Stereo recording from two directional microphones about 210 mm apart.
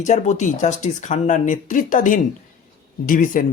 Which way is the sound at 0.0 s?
35° left (ahead or behind).